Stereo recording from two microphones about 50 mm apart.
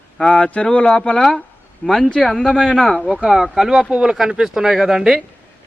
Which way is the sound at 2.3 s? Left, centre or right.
Centre.